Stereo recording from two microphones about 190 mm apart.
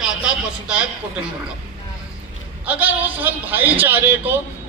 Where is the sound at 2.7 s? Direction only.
10° right (ahead or behind).